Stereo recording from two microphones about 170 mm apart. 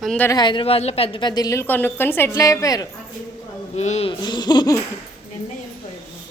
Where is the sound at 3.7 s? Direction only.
40° left (ahead or behind).